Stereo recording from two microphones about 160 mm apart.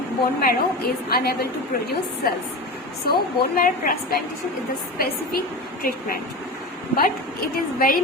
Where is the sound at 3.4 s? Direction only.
65° left (ahead or behind).